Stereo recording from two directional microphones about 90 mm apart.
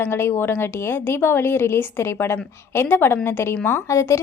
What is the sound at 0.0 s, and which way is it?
A woman's voice, 25° left (ahead or behind).